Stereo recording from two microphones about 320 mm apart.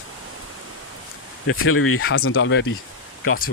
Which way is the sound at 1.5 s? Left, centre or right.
Left.